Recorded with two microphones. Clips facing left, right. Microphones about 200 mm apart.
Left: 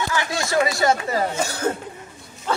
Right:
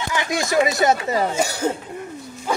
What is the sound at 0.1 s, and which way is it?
Speech, 20° right (ahead or behind).